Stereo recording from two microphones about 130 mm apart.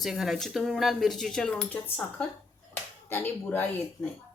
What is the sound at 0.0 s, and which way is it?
Speech, centre (ahead or behind).